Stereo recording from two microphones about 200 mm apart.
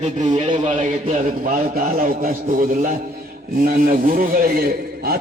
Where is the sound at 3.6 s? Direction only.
45° right (ahead or behind).